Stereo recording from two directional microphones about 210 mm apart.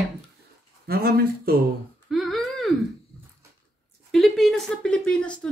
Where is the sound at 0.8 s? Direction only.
45° right (ahead or behind).